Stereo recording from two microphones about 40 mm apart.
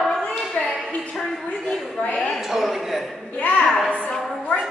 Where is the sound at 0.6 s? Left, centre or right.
Left.